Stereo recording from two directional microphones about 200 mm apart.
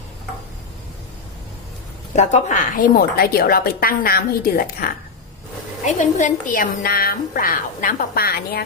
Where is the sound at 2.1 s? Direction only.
35° left (ahead or behind).